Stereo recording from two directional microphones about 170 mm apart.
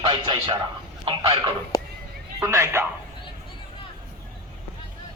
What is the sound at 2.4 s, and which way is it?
Speech, 15° right (ahead or behind).